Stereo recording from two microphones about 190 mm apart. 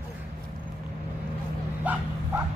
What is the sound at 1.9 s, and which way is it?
Bow-wow, 10° right (ahead or behind).